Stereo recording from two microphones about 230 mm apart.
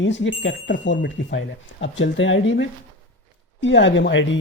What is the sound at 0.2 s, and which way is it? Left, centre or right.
Speech, left.